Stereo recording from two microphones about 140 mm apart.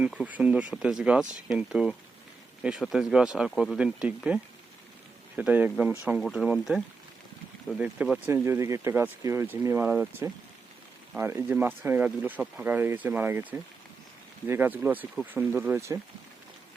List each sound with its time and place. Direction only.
0.0 s speech: 10° right (ahead or behind)
5.4 s speech: 10° right (ahead or behind)
8.4 s speech: 20° right (ahead or behind)